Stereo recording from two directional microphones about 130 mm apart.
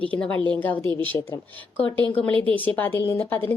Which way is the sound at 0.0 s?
10° left (ahead or behind).